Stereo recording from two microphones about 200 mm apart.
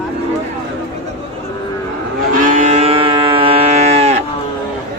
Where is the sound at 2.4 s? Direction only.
40° right (ahead or behind).